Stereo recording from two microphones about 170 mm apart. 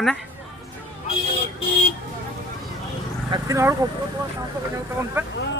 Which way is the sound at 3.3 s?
20° right (ahead or behind).